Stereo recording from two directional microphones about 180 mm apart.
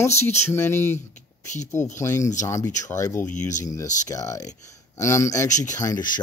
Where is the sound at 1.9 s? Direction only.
15° left (ahead or behind).